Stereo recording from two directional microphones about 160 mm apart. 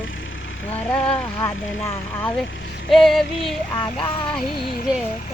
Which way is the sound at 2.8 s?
Centre (ahead or behind).